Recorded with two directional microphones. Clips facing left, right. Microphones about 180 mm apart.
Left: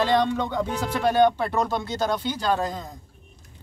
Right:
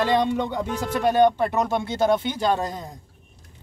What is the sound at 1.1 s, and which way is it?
Speech, 15° right (ahead or behind).